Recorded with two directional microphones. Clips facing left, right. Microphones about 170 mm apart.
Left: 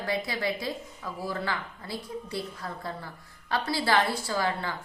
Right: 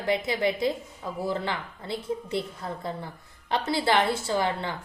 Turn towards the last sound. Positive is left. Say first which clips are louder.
# right 2 dB
turn(degrees=-20)  # may be behind; listen again after turning